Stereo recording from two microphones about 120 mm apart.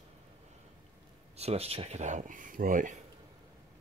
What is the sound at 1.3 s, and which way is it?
Speech, 60° right (ahead or behind).